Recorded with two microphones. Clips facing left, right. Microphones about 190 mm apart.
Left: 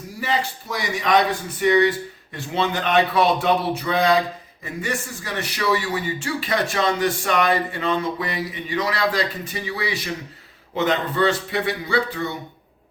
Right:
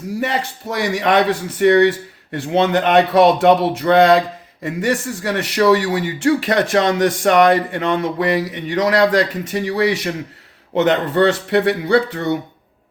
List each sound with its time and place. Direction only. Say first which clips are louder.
0.2 s speech: right 1 dB; 65° right (ahead or behind)